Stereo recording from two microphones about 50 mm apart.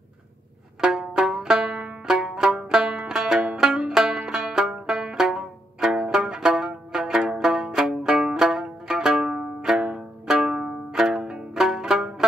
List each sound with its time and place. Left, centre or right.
0.7 s banjo: centre
4.3 s music: centre
8.4 s music: centre
10.9 s music: centre